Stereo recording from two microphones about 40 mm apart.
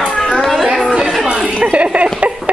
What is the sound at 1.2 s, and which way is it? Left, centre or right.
Chuckle, right.